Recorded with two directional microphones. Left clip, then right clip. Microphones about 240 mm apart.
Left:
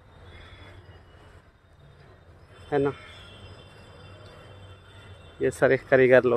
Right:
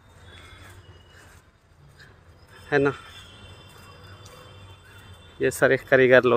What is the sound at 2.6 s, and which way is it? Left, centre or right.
Speech, centre.